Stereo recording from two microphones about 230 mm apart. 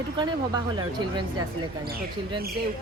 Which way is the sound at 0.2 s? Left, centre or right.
Centre.